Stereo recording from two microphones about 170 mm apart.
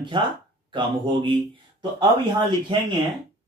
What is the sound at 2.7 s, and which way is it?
Speech, 25° right (ahead or behind).